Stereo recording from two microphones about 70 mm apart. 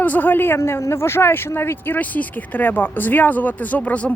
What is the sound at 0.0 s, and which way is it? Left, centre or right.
A man's voice, left.